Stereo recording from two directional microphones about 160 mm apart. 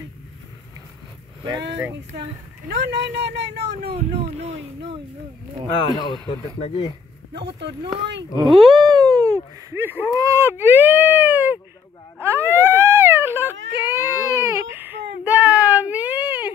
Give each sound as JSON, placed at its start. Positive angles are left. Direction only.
{"t": 2.7, "sound": "speech", "side_deg": -90}
{"t": 3.9, "sound": "speech", "side_deg": -40}
{"t": 5.8, "sound": "speech", "side_deg": 30}
{"t": 7.8, "sound": "speech", "side_deg": -30}
{"t": 12.2, "sound": "baby cry", "side_deg": -15}